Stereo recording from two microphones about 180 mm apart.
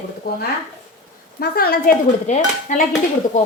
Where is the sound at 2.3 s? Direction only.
45° left (ahead or behind).